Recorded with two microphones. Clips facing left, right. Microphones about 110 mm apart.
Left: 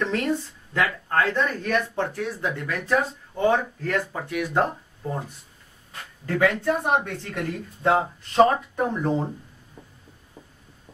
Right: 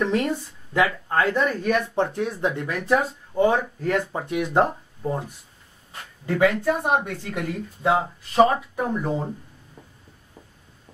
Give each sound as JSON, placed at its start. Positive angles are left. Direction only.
{"t": 0.0, "sound": "speech", "side_deg": -15}
{"t": 2.0, "sound": "speech", "side_deg": -20}
{"t": 6.6, "sound": "speech", "side_deg": -10}